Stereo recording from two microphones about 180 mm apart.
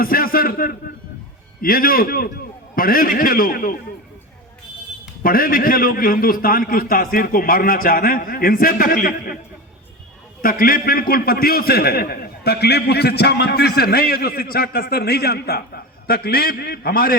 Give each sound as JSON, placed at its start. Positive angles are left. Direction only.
{"t": 0.0, "sound": "a man's voice", "side_deg": 55}
{"t": 5.2, "sound": "a man's voice", "side_deg": 55}
{"t": 10.4, "sound": "a man's voice", "side_deg": 50}